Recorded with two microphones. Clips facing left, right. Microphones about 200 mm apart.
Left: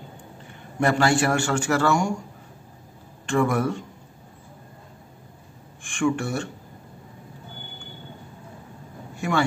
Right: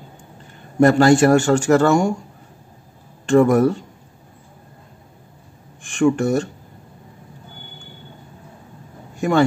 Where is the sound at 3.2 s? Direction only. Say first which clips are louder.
Right 9 dB; 40° right (ahead or behind).